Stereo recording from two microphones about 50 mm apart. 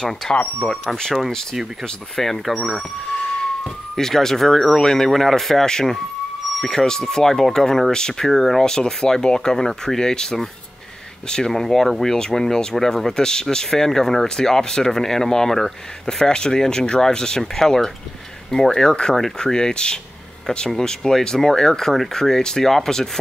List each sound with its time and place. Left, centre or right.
0.2 s speech: centre
2.1 s speech: centre
3.2 s a sound: left
3.6 s speech: centre
8.6 s speech: centre
11.6 s speech: centre